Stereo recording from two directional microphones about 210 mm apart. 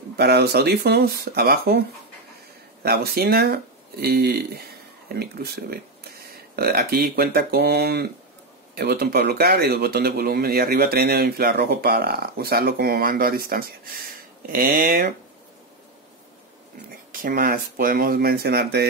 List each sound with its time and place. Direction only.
0.2 s speech: 50° right (ahead or behind)
17.1 s speech: 45° right (ahead or behind)